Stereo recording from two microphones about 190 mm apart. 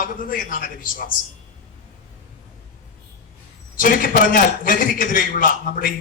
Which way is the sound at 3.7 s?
45° left (ahead or behind).